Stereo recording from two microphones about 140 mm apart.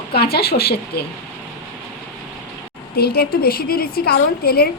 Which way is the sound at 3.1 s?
90° left.